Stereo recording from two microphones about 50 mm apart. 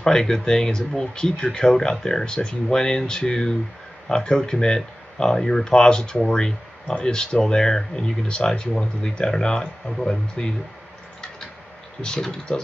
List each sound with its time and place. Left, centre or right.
0.0 s speech: centre
12.0 s speech: centre